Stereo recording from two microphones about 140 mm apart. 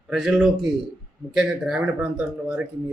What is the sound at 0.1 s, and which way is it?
Speech, 5° right (ahead or behind).